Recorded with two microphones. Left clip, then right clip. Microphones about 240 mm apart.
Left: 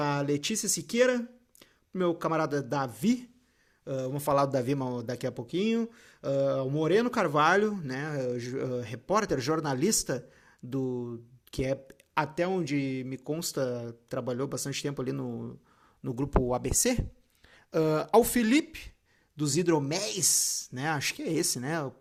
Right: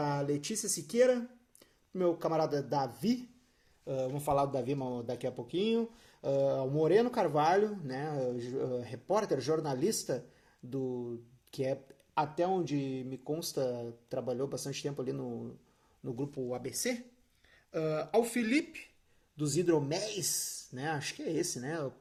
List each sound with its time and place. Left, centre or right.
0.0 s speech: left
4.3 s speech: left
11.5 s speech: left